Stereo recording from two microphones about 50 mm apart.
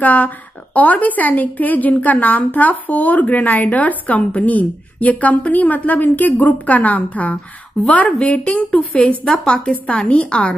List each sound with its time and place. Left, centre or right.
0.0 s a woman's voice: left
9.2 s a woman's voice: centre
9.5 s a woman's voice: left